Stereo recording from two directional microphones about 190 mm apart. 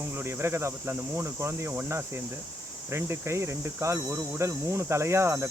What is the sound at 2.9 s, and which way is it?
Speech, 15° right (ahead or behind).